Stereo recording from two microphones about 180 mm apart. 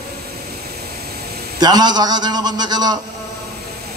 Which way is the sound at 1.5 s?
25° right (ahead or behind).